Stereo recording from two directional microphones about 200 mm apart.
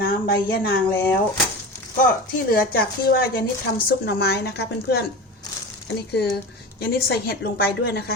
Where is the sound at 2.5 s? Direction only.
50° left (ahead or behind).